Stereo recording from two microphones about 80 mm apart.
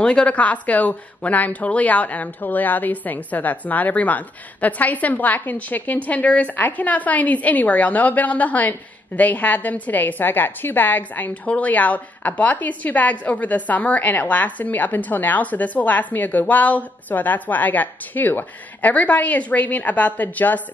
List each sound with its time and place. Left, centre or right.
0.0 s a woman's voice: centre